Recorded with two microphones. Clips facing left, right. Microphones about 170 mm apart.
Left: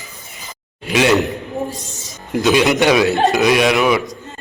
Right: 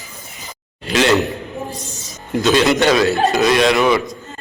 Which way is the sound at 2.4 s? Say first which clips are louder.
Even; 15° left (ahead or behind).